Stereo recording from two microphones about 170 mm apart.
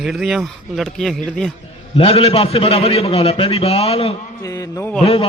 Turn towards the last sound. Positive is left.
turn(degrees=35)  # may be behind; listen again after turning